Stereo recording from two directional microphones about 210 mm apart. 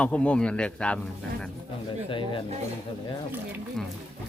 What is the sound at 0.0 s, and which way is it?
Speech, 5° left (ahead or behind).